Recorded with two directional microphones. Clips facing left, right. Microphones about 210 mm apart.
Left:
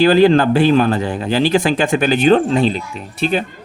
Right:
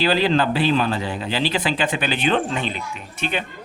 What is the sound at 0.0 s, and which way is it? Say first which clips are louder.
Speech: left 8 dB; 50° left (ahead or behind).